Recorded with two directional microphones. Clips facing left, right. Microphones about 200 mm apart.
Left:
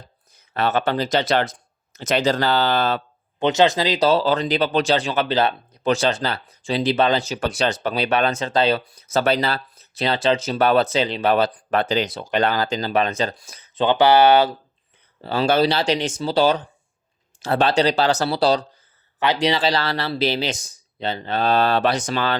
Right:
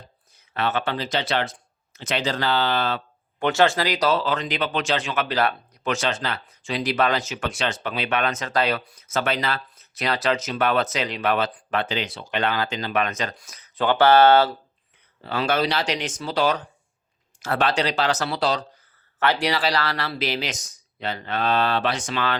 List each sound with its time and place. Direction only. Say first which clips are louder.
0.3 s speech: left 4 dB; 40° left (ahead or behind)
3.4 s speech: left 3 dB; 20° left (ahead or behind)
15.2 s speech: left 5 dB; 30° left (ahead or behind)
19.2 s speech: left 3 dB; 20° left (ahead or behind); by 22.4 s 35° left (ahead or behind)